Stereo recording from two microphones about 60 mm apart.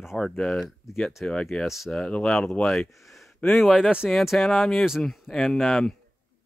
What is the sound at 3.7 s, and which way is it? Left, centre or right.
Speech, centre.